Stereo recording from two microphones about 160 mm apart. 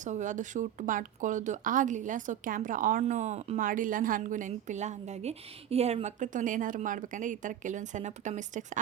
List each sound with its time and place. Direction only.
0.0 s a woman's voice: 50° right (ahead or behind)
3.6 s a woman's voice: 60° right (ahead or behind)